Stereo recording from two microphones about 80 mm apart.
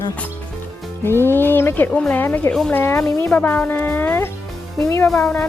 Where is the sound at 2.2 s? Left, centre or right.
Left.